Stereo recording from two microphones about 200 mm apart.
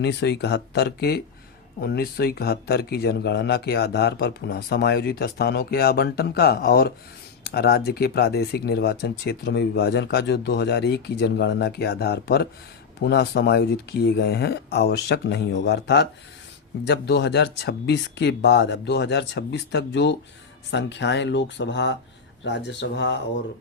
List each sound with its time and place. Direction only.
0.0 s speech: 55° left (ahead or behind)